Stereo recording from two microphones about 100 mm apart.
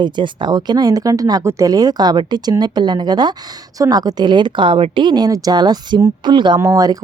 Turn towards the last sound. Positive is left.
turn(degrees=-40)  # may be behind; listen again after turning